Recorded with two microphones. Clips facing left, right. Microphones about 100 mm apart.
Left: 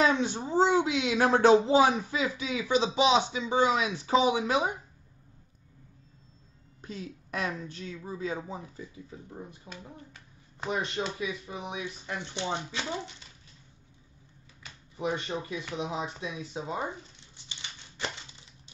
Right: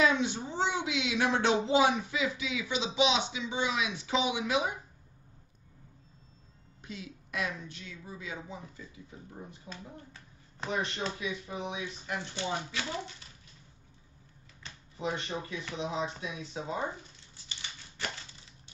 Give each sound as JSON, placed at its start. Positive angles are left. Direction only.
{"t": 0.0, "sound": "a sound", "side_deg": 40}
{"t": 0.5, "sound": "speech", "side_deg": 40}
{"t": 6.8, "sound": "speech", "side_deg": 35}
{"t": 9.7, "sound": "speech", "side_deg": 30}
{"t": 10.6, "sound": "speech", "side_deg": 15}
{"t": 15.3, "sound": "speech", "side_deg": 20}
{"t": 16.2, "sound": "speech", "side_deg": 25}
{"t": 17.5, "sound": "a sound", "side_deg": 20}